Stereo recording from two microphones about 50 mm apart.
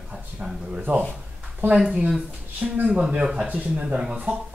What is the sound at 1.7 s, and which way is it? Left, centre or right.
Speech, centre.